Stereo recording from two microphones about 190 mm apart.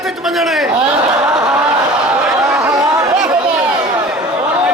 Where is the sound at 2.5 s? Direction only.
15° right (ahead or behind).